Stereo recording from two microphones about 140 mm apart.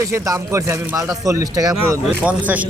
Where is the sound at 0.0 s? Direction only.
20° right (ahead or behind).